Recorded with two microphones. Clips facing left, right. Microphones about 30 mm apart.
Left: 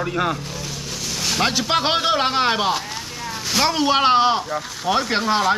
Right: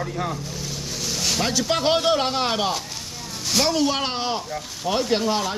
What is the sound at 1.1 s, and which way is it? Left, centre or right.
Vehicle, centre.